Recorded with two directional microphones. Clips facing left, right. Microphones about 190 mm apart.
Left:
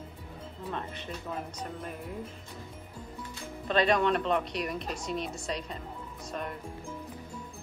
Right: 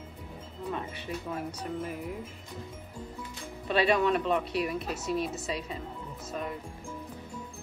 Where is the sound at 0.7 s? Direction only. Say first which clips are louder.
Right 1 dB; 10° right (ahead or behind).